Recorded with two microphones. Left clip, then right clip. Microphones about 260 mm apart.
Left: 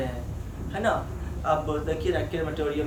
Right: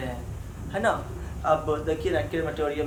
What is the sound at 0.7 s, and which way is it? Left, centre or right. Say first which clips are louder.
A man's voice: right 1 dB; centre.